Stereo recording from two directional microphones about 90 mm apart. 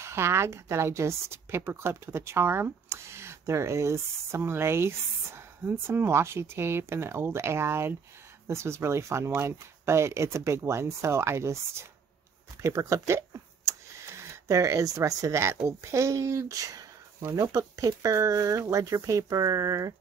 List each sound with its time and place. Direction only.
0.0 s a woman's voice: 30° right (ahead or behind)